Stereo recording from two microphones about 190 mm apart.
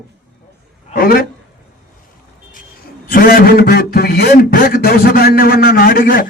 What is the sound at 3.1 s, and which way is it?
A man's voice, 50° left (ahead or behind).